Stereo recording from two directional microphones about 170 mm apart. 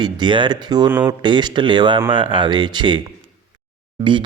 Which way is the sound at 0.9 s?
10° right (ahead or behind).